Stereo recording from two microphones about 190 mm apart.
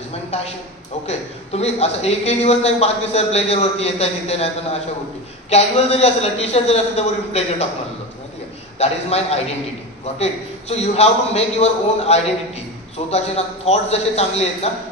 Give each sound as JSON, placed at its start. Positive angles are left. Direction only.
{"t": 1.0, "sound": "a man's voice", "side_deg": 35}
{"t": 5.5, "sound": "a man's voice", "side_deg": 35}
{"t": 8.7, "sound": "a man's voice", "side_deg": 35}
{"t": 13.7, "sound": "a man's voice", "side_deg": 35}